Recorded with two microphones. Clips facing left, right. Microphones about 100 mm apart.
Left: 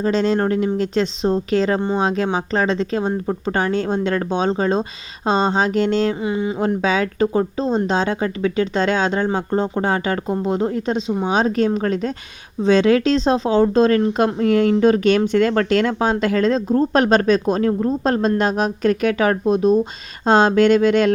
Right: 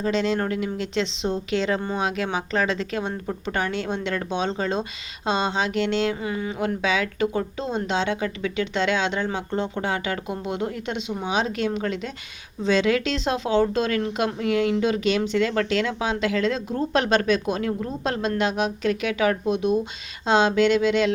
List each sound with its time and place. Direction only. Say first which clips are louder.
0.0 s speech: left 5 dB; 35° left (ahead or behind)
1.8 s speech: left 6 dB; 30° left (ahead or behind)
6.2 s speech: left 6 dB; 20° left (ahead or behind)
6.6 s speech: left 4 dB; 35° left (ahead or behind)